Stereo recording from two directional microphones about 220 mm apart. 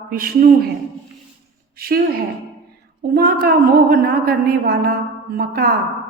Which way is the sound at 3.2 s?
45° right (ahead or behind).